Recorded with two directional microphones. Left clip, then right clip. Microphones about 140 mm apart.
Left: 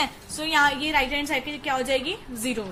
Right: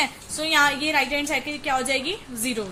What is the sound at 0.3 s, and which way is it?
A woman's voice, 35° right (ahead or behind).